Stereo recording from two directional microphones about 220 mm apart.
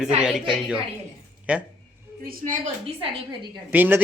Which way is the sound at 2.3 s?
35° right (ahead or behind).